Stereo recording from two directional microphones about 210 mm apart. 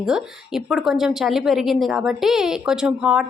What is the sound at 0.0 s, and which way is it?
A woman's voice, 5° right (ahead or behind).